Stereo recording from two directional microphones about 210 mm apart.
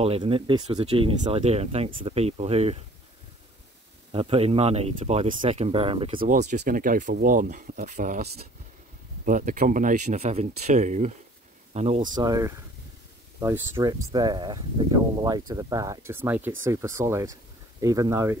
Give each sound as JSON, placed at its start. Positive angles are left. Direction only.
{"t": 0.0, "sound": "speech", "side_deg": -25}
{"t": 4.1, "sound": "speech", "side_deg": -25}
{"t": 13.7, "sound": "speech", "side_deg": -20}